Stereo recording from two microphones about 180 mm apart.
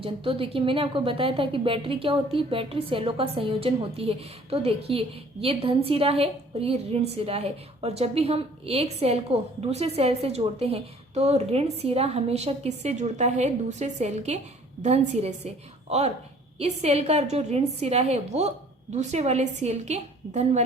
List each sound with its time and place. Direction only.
0.0 s a woman's voice: 30° right (ahead or behind)